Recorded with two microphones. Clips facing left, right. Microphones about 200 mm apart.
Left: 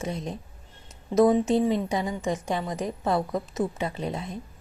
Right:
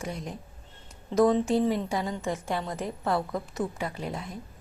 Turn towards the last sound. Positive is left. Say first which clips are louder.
# left 3 dB
turn(degrees=20)  # may be behind; listen again after turning